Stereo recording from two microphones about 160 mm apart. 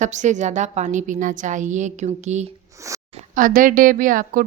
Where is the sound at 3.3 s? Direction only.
60° right (ahead or behind).